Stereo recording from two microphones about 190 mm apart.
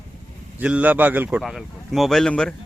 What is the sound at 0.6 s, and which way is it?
Speech, 5° right (ahead or behind).